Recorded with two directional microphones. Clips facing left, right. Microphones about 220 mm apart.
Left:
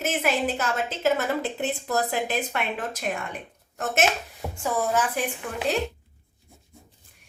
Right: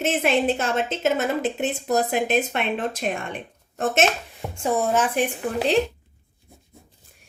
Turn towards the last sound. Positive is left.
turn(degrees=-40)  # may be behind; listen again after turning